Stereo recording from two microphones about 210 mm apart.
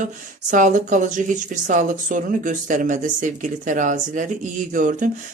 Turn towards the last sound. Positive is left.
turn(degrees=-40)  # may be behind; listen again after turning